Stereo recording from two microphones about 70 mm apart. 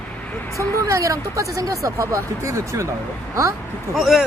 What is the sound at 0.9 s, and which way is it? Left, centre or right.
Speech, right.